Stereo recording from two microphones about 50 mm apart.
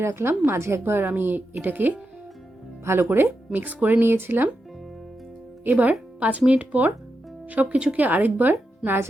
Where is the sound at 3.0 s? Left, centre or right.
Right.